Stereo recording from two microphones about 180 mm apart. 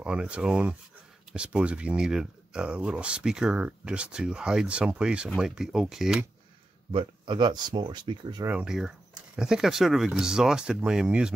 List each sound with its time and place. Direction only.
0.0 s speech: 5° right (ahead or behind)
6.9 s speech: 25° right (ahead or behind)
8.5 s speech: 5° right (ahead or behind)